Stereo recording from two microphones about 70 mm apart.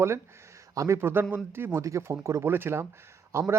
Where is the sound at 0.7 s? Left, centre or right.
Right.